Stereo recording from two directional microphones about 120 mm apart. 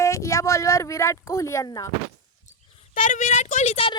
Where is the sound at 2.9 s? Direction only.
90° left; by 3.9 s 60° left (ahead or behind).